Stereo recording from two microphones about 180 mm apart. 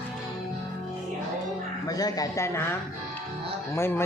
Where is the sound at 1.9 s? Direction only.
20° left (ahead or behind).